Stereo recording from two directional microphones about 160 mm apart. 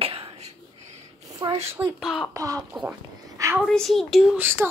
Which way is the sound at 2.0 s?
Centre (ahead or behind).